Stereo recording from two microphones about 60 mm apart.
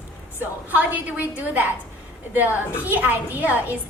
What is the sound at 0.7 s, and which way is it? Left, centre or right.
Speech, right.